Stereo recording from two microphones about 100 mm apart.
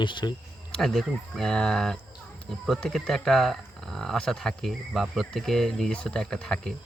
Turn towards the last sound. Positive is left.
turn(degrees=5)  # may be behind; listen again after turning